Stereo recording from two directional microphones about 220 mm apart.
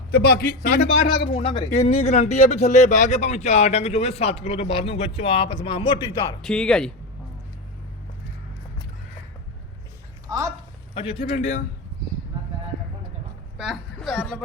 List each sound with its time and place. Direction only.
0.1 s a man's voice: 45° left (ahead or behind)
1.3 s speech: 30° left (ahead or behind)
6.4 s speech: 5° left (ahead or behind)
10.2 s speech: 15° right (ahead or behind)
10.9 s speech: 25° left (ahead or behind)
13.6 s a woman's voice: centre (ahead or behind)